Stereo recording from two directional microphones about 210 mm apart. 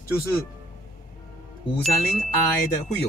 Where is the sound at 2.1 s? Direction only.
35° left (ahead or behind).